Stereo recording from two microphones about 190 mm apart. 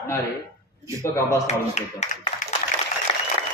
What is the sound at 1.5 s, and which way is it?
Speech, 35° left (ahead or behind).